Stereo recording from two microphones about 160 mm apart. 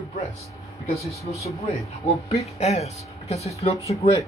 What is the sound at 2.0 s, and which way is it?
Speech, 45° left (ahead or behind).